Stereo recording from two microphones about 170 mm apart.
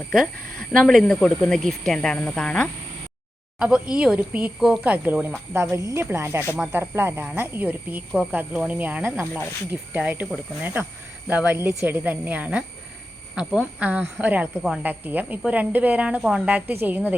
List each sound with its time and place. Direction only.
0.1 s speech: centre (ahead or behind)
3.6 s speech: 5° right (ahead or behind)